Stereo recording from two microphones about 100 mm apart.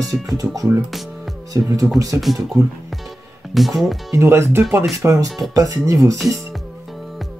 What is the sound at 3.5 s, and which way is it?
Speech, centre (ahead or behind).